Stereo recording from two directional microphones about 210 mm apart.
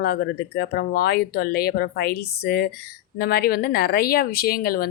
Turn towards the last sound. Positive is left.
turn(degrees=45)  # may be behind; listen again after turning